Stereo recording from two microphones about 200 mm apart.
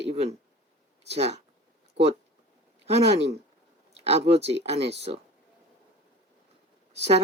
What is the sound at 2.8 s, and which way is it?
Speech, 30° right (ahead or behind).